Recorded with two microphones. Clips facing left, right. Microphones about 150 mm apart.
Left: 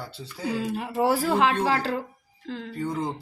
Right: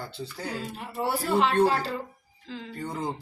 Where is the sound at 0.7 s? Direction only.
90° left.